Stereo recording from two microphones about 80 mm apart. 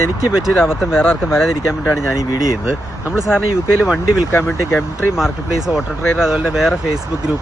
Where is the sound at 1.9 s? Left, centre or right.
Left.